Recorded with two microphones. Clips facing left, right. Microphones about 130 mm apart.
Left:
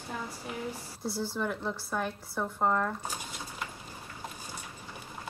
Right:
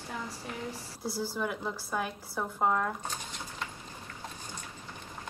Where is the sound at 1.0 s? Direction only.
Centre (ahead or behind).